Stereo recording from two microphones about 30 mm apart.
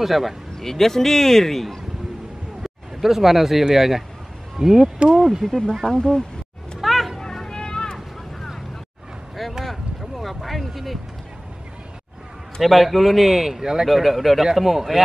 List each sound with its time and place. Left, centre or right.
0.0 s speech: centre
0.6 s a man's voice: centre
2.6 s speech: centre
5.1 s a man's voice: centre
5.9 s speech: left
6.8 s music: centre
7.4 s vehicle: left
9.7 s a sound: centre
12.6 s speech: centre
13.8 s a man's voice: centre